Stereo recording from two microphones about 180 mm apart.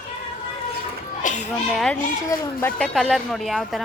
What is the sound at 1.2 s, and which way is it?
Children playing, 45° left (ahead or behind).